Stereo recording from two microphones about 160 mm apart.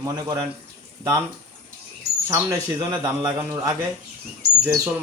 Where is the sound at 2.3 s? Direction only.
25° right (ahead or behind).